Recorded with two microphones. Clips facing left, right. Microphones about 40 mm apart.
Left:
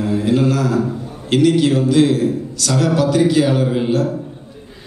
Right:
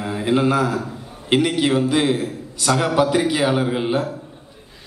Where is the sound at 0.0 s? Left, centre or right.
Centre.